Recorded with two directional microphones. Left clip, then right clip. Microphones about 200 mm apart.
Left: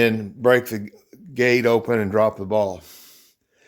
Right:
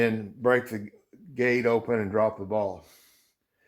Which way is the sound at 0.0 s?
45° left (ahead or behind).